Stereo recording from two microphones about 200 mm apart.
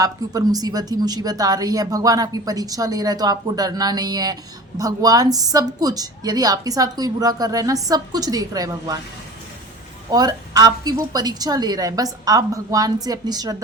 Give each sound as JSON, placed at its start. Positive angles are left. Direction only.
{"t": 0.0, "sound": "speech", "side_deg": -20}
{"t": 10.1, "sound": "speech", "side_deg": -20}